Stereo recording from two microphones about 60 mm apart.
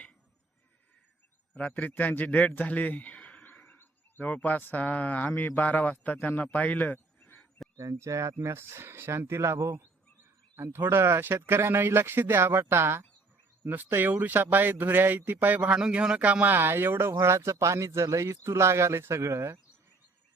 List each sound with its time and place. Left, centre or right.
1.5 s a man's voice: left
7.8 s speech: right
8.4 s a man's voice: right
16.5 s speech: right
17.1 s speech: right